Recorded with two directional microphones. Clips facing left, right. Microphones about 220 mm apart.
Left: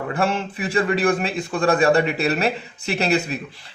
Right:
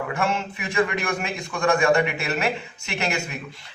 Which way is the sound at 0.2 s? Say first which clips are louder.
Left 6 dB; 35° left (ahead or behind).